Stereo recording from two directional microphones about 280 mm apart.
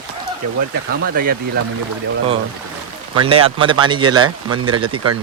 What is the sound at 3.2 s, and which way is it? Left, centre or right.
Speech, centre.